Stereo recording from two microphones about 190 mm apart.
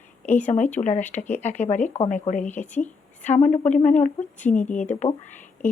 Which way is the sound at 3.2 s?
40° left (ahead or behind).